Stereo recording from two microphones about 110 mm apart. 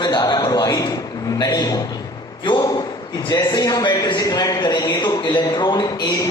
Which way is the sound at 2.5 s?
50° left (ahead or behind).